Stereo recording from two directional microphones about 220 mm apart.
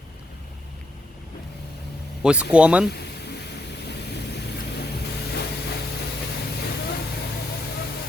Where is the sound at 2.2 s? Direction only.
5° right (ahead or behind).